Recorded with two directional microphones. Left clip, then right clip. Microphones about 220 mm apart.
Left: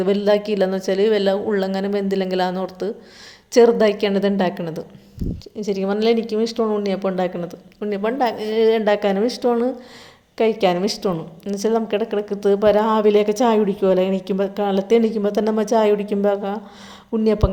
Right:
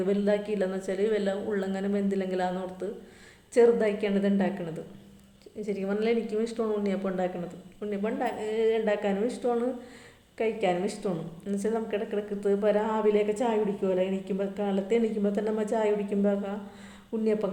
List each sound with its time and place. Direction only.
0.0 s speech: 35° left (ahead or behind)